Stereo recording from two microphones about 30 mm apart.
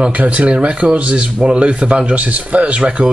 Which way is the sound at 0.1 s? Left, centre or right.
Right.